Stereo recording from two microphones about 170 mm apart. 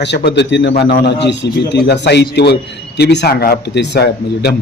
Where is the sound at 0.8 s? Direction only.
75° left (ahead or behind).